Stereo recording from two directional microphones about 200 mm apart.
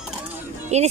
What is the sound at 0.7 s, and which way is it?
Speech, 35° right (ahead or behind).